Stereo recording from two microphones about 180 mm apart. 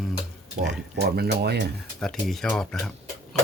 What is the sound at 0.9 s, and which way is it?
Speech, 65° right (ahead or behind).